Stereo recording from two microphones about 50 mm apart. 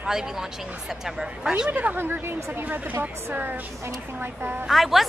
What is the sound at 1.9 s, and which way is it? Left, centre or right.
Speech, right.